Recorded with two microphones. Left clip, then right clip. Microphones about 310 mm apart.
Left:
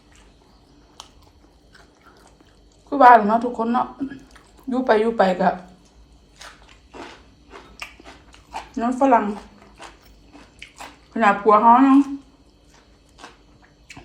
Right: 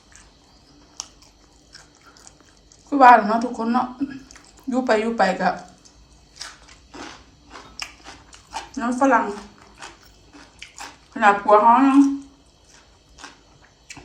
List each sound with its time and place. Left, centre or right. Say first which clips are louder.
1.7 s biting: right 3 dB; centre
2.9 s a woman's voice: even; centre
6.9 s a sound: even; centre
7.8 s dog: right 3 dB; centre
10.6 s speech: right 1 dB; centre
13.2 s a sound: right 1 dB; centre